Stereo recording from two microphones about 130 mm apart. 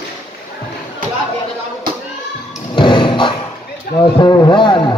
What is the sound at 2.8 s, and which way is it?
Thump, 40° left (ahead or behind).